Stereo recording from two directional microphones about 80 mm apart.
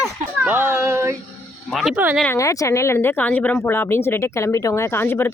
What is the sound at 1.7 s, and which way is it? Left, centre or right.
Speech, centre.